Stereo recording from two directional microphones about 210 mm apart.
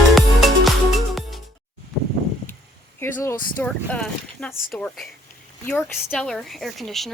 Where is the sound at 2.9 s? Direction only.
10° left (ahead or behind).